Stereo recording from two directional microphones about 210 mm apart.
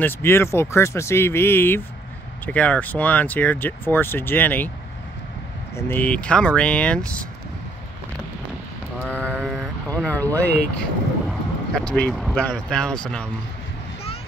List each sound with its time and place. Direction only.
0.0 s speech: 10° left (ahead or behind)
5.8 s speech: 10° left (ahead or behind)
9.4 s speech: centre (ahead or behind)